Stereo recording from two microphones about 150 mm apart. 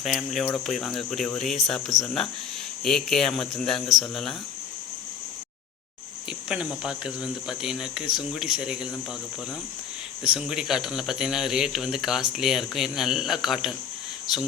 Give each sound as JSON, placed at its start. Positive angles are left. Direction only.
{"t": 0.0, "sound": "speech", "side_deg": 0}
{"t": 6.2, "sound": "speech", "side_deg": -5}
{"t": 10.2, "sound": "speech", "side_deg": -5}